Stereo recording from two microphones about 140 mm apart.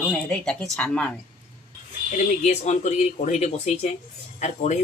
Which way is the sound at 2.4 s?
55° left (ahead or behind).